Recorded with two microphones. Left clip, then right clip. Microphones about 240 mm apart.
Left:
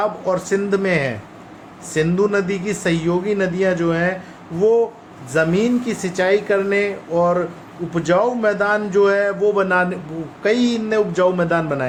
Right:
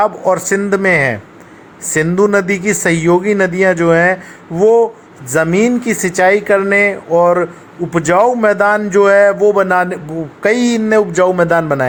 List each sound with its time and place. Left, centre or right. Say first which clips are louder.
0.0 s a man's voice: right 7 dB; right